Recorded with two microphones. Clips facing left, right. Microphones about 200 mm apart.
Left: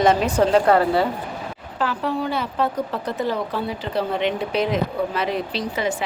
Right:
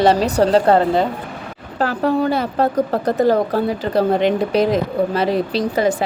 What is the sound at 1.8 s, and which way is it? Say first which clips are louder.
Speech: right 6 dB; 40° right (ahead or behind).